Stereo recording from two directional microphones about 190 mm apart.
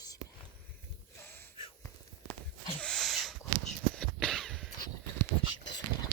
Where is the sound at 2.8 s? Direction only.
Centre (ahead or behind).